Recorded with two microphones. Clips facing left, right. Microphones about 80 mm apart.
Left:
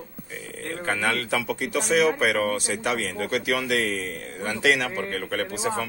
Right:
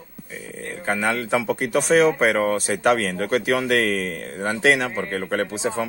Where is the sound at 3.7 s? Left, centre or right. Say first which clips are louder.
Right 5 dB; right.